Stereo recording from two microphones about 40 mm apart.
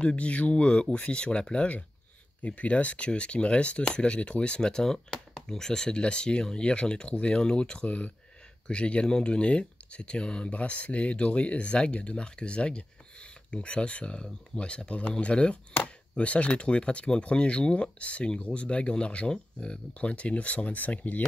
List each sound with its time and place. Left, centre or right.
0.0 s speech: left
2.4 s speech: left
10.5 s speech: left
20.7 s speech: left